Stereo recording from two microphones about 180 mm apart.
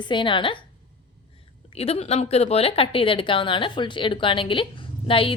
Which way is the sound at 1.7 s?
35° left (ahead or behind).